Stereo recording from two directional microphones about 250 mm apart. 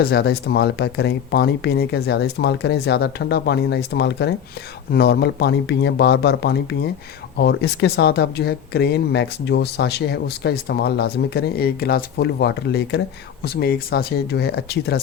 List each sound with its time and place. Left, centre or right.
0.0 s speech: left